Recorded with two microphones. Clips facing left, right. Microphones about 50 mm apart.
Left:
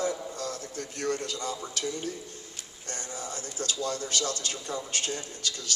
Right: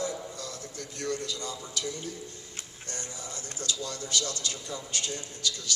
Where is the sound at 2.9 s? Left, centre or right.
Left.